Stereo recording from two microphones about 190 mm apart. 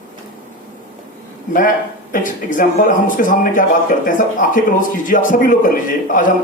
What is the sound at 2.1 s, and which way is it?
A man's voice, 45° left (ahead or behind).